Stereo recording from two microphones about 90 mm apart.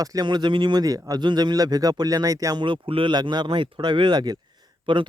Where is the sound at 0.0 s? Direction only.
45° right (ahead or behind).